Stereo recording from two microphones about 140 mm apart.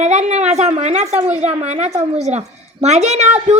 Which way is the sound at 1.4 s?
50° right (ahead or behind).